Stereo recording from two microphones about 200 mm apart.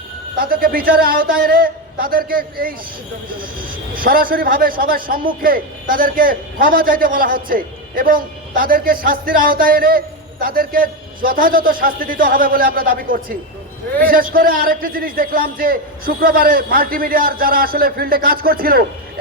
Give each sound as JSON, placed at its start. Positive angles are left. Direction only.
{"t": 0.3, "sound": "a man's voice", "side_deg": -50}
{"t": 3.9, "sound": "a man's voice", "side_deg": -45}